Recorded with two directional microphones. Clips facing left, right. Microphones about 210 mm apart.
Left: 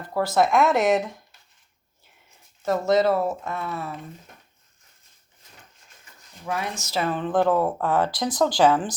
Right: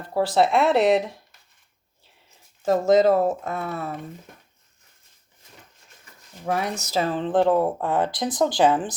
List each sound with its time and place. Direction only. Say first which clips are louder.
0.1 s speech: right 1 dB; 30° right (ahead or behind)
2.6 s speech: right 3 dB; 40° right (ahead or behind)
6.5 s speech: right 3 dB; 35° right (ahead or behind); by 9.0 s 20° right (ahead or behind)